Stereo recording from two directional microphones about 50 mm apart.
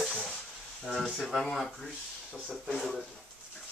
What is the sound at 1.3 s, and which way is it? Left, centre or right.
Speech, centre.